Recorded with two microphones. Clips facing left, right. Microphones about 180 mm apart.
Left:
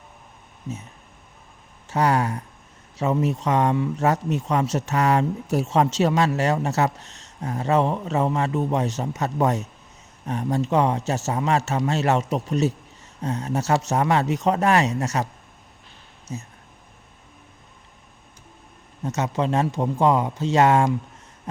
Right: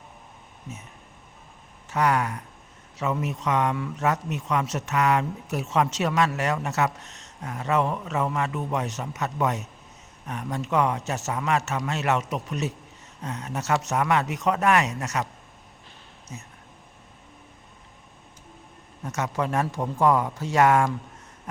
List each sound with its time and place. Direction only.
1.9 s speech: 30° left (ahead or behind)
16.3 s speech: 30° left (ahead or behind)
19.0 s speech: 25° left (ahead or behind)
21.5 s hoot: 25° left (ahead or behind)